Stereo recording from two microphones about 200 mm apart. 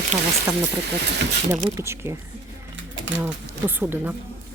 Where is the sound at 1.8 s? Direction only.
15° right (ahead or behind).